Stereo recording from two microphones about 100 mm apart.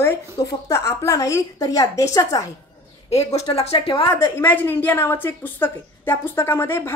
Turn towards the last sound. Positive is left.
turn(degrees=25)  # may be behind; listen again after turning